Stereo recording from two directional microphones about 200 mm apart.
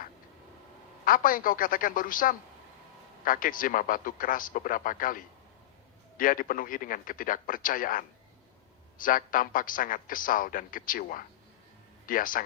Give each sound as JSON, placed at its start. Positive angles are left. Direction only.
{"t": 1.0, "sound": "a man's voice", "side_deg": 45}